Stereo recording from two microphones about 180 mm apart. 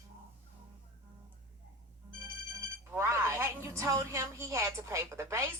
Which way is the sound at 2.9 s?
15° right (ahead or behind).